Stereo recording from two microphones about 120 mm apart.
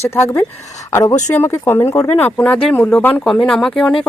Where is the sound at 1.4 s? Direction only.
20° left (ahead or behind).